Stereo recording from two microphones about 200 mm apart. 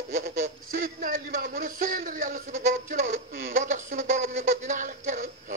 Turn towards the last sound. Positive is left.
turn(degrees=-40)  # may be behind; listen again after turning